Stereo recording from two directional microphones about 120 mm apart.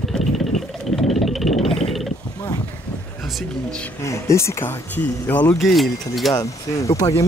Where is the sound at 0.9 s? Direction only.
Centre (ahead or behind).